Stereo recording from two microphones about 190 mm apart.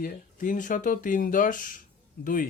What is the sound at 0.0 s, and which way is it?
Speech, 45° left (ahead or behind).